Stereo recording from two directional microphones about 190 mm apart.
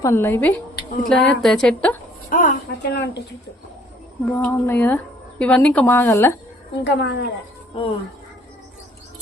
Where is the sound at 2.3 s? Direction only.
45° left (ahead or behind).